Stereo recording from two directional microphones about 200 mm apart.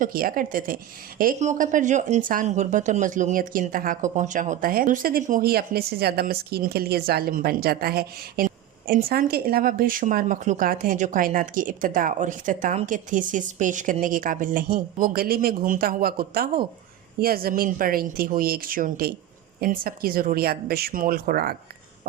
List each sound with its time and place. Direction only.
0.0 s speech: 45° right (ahead or behind)